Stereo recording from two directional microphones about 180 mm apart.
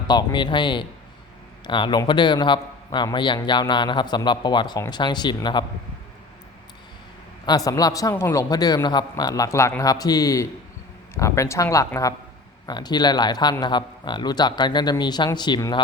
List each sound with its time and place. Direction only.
0.1 s a man's voice: 25° left (ahead or behind)
7.4 s a man's voice: 20° left (ahead or behind)